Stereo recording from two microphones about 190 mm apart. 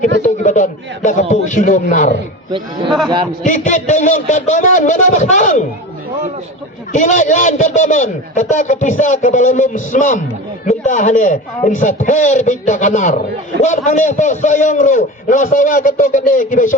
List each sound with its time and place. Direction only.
0.2 s a man's voice: 40° left (ahead or behind)
3.4 s a man's voice: 40° left (ahead or behind)
6.9 s a man's voice: 40° left (ahead or behind)